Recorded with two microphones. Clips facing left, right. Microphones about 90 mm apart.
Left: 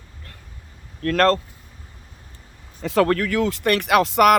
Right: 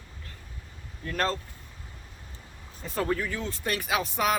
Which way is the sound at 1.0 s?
75° left (ahead or behind).